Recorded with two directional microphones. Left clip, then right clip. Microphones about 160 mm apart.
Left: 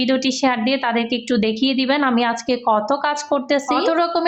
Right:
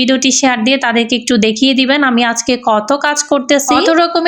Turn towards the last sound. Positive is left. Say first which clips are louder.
# right 8 dB
turn(degrees=-25)  # may be behind; listen again after turning